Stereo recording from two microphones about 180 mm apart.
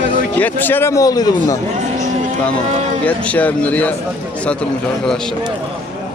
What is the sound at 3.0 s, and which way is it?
A man's voice, 5° left (ahead or behind).